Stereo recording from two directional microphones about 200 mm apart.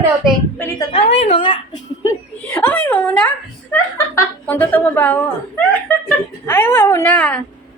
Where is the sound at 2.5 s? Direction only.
10° left (ahead or behind).